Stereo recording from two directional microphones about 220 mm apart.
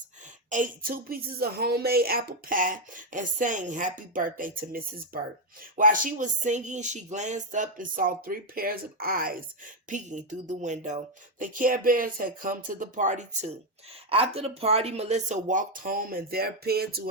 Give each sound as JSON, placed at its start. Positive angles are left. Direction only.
{"t": 0.5, "sound": "a woman's voice", "side_deg": -40}